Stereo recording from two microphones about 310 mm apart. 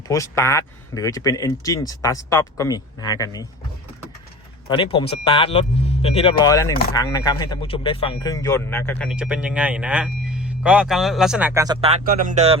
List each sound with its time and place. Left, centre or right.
0.1 s speech: centre
4.7 s speech: centre; by 12.5 s right